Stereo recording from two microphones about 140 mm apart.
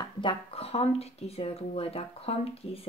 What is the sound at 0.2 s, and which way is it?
A woman's voice, 40° left (ahead or behind).